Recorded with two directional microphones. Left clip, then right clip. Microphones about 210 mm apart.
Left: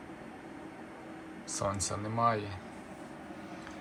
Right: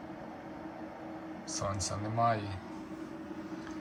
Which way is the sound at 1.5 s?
5° right (ahead or behind).